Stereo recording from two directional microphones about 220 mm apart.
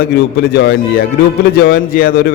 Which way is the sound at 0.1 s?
45° left (ahead or behind).